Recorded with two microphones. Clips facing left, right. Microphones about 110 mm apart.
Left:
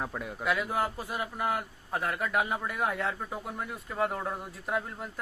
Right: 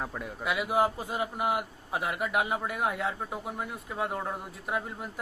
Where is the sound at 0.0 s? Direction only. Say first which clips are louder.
Left 1 dB; centre (ahead or behind).